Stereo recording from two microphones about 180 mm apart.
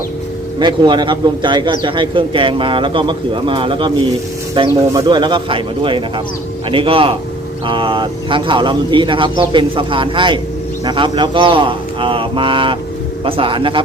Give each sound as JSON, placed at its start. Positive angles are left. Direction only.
{"t": 0.6, "sound": "a man's voice", "side_deg": -25}